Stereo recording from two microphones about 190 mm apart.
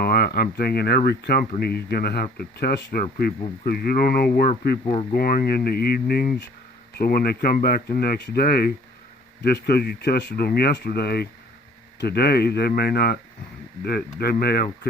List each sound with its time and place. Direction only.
0.0 s speech: 55° left (ahead or behind)